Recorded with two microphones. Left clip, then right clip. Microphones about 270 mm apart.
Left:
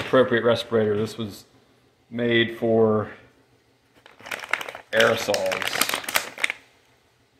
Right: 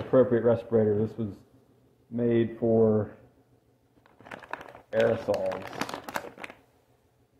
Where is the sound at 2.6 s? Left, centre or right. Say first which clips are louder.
Left 1 dB; centre.